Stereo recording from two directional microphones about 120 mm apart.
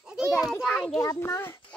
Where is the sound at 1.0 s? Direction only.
25° left (ahead or behind).